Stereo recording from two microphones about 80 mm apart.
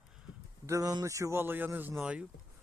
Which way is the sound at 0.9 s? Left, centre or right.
Right.